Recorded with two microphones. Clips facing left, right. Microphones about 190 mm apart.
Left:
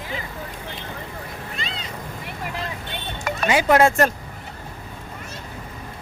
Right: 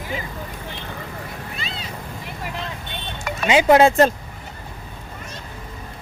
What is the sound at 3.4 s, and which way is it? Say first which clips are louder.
Speech: right 3 dB; 20° right (ahead or behind).